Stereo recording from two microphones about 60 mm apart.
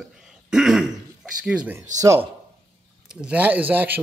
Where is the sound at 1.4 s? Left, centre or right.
Centre.